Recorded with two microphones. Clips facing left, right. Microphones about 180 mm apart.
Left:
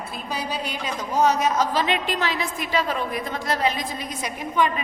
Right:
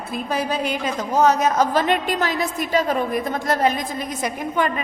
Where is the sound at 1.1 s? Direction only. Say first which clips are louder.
Right 3 dB; 50° right (ahead or behind).